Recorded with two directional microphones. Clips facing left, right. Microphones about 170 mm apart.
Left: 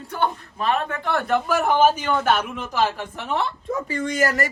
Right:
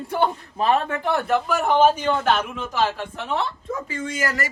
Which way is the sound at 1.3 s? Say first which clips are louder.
Left 2 dB; 5° left (ahead or behind).